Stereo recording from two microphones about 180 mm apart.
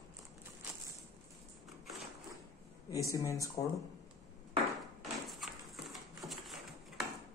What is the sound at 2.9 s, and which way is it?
Speech, 20° left (ahead or behind).